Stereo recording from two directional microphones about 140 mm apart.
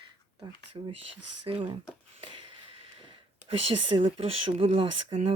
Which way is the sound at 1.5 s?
45° right (ahead or behind).